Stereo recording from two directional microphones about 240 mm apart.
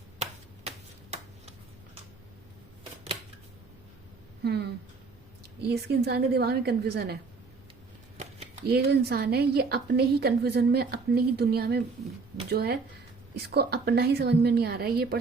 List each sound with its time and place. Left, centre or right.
4.4 s a woman's voice: right
8.6 s a woman's voice: right